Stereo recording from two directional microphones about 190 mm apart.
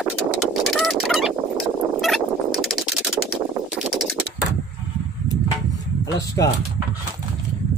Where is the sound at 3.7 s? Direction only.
Centre (ahead or behind).